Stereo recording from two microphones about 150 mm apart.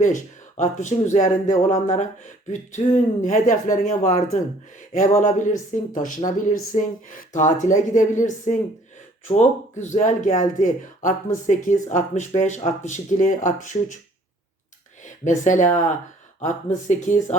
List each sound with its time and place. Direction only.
0.0 s speech: 55° left (ahead or behind)
15.0 s speech: 55° left (ahead or behind)